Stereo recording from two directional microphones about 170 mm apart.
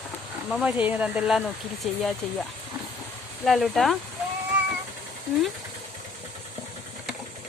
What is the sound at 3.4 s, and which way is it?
Speech, centre (ahead or behind).